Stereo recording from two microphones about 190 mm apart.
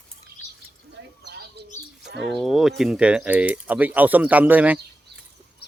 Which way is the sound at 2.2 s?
Centre (ahead or behind).